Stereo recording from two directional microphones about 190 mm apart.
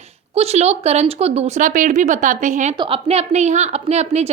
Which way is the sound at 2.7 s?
25° right (ahead or behind).